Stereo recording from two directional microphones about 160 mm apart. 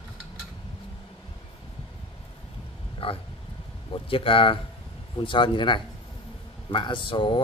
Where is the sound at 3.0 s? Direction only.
35° left (ahead or behind).